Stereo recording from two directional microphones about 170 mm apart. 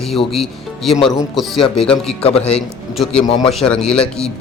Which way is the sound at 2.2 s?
35° left (ahead or behind).